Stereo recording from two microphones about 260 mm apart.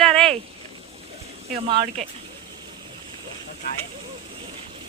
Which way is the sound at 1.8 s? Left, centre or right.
Right.